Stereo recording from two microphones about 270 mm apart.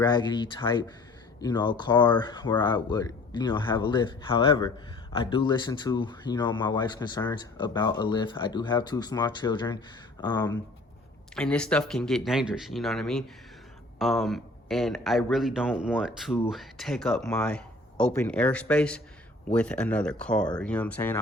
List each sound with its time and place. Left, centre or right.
0.0 s speech: centre
11.3 s speech: centre